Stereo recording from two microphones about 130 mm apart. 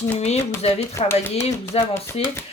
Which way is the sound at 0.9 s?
20° left (ahead or behind).